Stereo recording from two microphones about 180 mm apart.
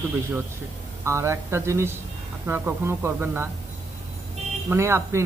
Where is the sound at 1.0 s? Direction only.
15° right (ahead or behind).